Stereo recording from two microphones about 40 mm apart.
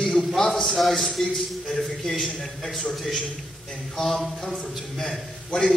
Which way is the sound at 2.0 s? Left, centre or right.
Centre.